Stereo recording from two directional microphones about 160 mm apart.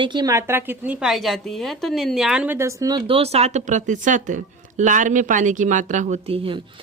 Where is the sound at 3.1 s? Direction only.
40° right (ahead or behind).